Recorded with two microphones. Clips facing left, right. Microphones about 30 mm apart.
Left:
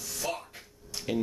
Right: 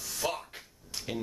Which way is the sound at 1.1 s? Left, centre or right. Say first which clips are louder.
Left 6 dB; centre.